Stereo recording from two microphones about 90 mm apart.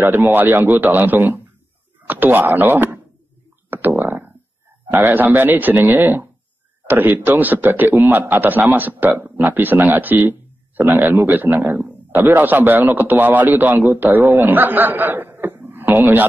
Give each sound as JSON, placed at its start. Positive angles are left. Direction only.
{"t": 0.0, "sound": "a man's voice", "side_deg": -20}
{"t": 3.7, "sound": "a sound", "side_deg": -20}
{"t": 4.9, "sound": "a man's voice", "side_deg": -20}